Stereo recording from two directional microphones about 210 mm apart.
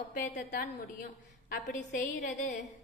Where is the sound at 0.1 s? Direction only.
45° left (ahead or behind).